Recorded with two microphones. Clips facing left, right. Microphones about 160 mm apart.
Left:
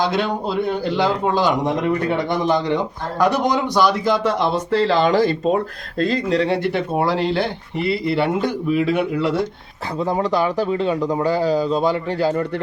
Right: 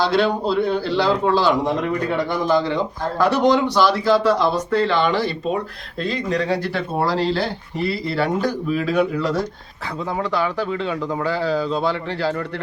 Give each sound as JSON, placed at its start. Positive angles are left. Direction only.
{"t": 0.0, "sound": "a man's voice", "side_deg": 15}
{"t": 6.5, "sound": "a man's voice", "side_deg": 20}
{"t": 10.7, "sound": "speech", "side_deg": 30}
{"t": 11.0, "sound": "a man's voice", "side_deg": 20}